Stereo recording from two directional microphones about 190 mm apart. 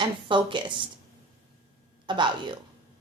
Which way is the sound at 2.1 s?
25° right (ahead or behind).